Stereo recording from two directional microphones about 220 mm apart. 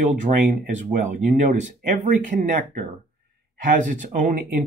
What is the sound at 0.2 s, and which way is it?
Speech, 35° right (ahead or behind).